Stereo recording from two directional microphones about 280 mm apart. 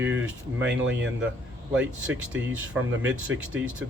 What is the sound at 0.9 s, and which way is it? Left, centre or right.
Speech, right.